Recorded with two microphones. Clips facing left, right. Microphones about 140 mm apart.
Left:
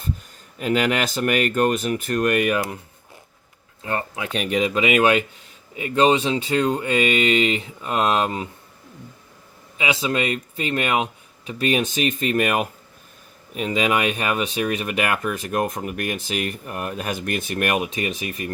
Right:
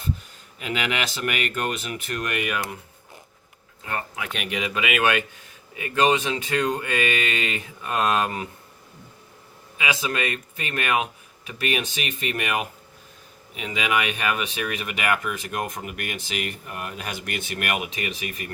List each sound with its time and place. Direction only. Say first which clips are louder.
0.6 s speech: left 6 dB; 40° left (ahead or behind)
3.8 s speech: left 4 dB; 30° left (ahead or behind)
9.7 s speech: left 4 dB; 30° left (ahead or behind)